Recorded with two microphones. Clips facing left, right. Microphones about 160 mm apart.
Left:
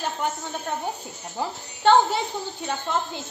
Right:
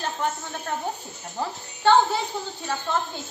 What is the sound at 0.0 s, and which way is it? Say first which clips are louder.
Snake: even; centre (ahead or behind).